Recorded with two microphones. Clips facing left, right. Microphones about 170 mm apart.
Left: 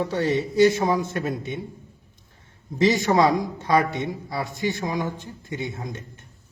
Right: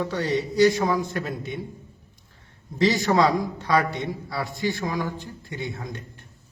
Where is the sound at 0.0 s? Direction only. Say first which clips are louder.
Left 2 dB; 25° left (ahead or behind).